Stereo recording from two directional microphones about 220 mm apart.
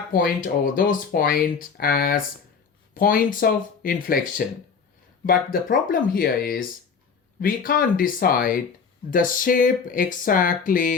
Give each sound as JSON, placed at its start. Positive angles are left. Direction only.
{"t": 0.1, "sound": "speech", "side_deg": 40}